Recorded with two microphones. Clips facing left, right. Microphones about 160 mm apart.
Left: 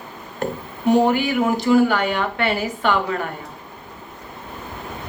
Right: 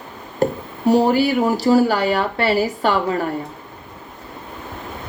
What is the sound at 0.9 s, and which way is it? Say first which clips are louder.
Speech: right 2 dB; 35° right (ahead or behind).